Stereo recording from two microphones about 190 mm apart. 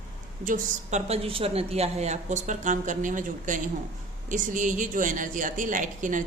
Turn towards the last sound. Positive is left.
turn(degrees=-40)  # may be behind; listen again after turning